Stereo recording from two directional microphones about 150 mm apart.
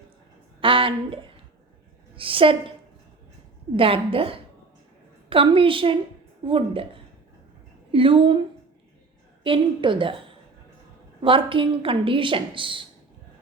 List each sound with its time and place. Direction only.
0.6 s a sound: 35° right (ahead or behind)
2.1 s a woman's voice: 35° right (ahead or behind)
3.8 s a woman's voice: 40° right (ahead or behind)
7.9 s a woman's voice: 35° right (ahead or behind)
9.4 s a woman's voice: 35° right (ahead or behind)